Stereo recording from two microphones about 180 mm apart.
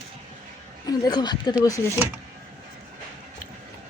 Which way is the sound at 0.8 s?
20° left (ahead or behind).